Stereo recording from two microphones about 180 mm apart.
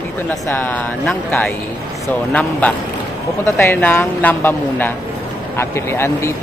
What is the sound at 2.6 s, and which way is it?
Speech, 10° left (ahead or behind).